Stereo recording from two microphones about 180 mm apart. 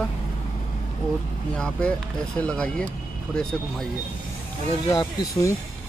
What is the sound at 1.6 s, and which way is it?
Speech, 5° left (ahead or behind).